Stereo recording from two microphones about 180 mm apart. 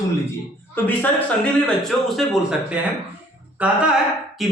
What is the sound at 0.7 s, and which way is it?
A man's voice, 10° left (ahead or behind).